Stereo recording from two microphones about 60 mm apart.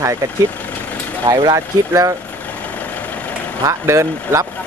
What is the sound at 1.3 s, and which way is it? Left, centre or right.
Speech, right.